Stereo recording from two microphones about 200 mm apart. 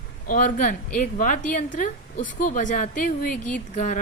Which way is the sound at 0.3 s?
40° left (ahead or behind).